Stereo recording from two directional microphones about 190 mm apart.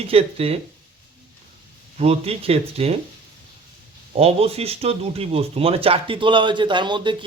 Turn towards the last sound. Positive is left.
turn(degrees=-25)  # may be behind; listen again after turning